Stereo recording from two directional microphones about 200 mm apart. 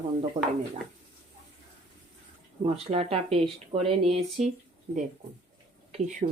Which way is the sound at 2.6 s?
30° right (ahead or behind).